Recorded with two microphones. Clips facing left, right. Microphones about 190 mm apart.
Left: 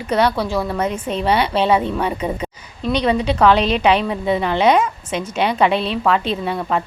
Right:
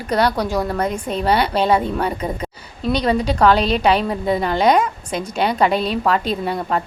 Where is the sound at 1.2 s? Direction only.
35° right (ahead or behind).